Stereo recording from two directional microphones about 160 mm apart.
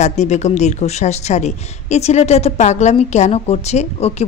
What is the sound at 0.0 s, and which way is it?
A woman's voice, 45° left (ahead or behind).